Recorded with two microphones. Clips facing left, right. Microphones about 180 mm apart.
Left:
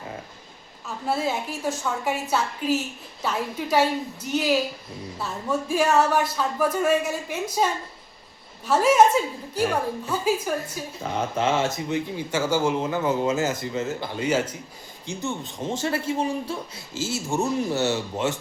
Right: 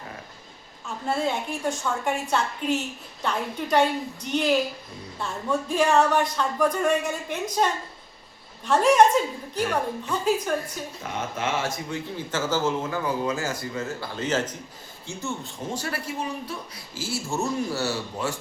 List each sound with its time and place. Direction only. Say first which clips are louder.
1.0 s a woman's voice: even; 5° left (ahead or behind)
10.1 s speech: even; 5° left (ahead or behind)
11.1 s speech: left 5 dB; 30° left (ahead or behind)